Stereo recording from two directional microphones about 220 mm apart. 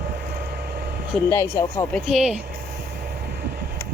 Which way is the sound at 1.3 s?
10° left (ahead or behind).